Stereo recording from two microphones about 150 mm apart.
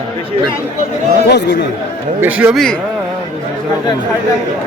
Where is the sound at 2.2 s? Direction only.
10° right (ahead or behind).